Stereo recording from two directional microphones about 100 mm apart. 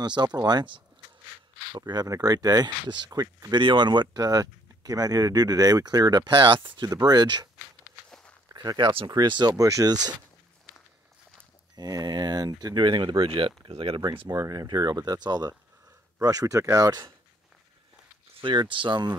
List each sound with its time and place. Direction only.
0.0 s speech: 45° right (ahead or behind)
3.5 s speech: 50° right (ahead or behind)
6.9 s speech: 40° right (ahead or behind)
8.5 s speech: 45° right (ahead or behind)
11.7 s speech: 40° right (ahead or behind); by 14.0 s 65° right (ahead or behind)
14.3 s speech: 40° right (ahead or behind)
18.4 s speech: 55° right (ahead or behind)